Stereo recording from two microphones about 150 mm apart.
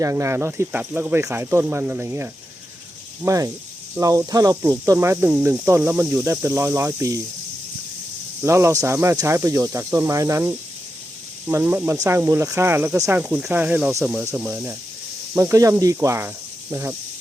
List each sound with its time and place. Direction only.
0.0 s speech: 20° right (ahead or behind)
8.4 s speech: 20° right (ahead or behind)